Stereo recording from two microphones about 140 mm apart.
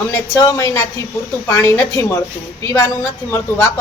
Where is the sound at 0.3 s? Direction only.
25° left (ahead or behind).